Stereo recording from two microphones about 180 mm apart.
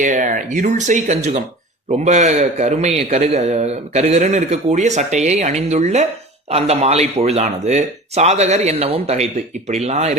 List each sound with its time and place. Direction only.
0.0 s a man's voice: 45° right (ahead or behind)